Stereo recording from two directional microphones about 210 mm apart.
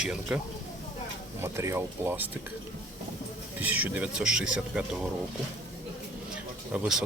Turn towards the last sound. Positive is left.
turn(degrees=-5)  # may be behind; listen again after turning